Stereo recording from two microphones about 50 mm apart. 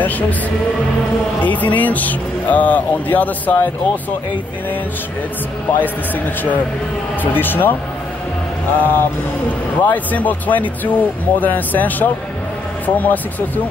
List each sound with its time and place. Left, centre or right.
1.4 s speech: left
5.7 s speech: left
8.7 s speech: left